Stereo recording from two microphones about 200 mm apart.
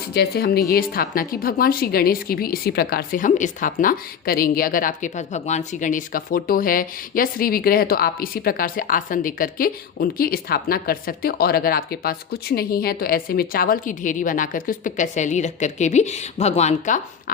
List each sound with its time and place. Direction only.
0.1 s a woman's voice: 50° left (ahead or behind)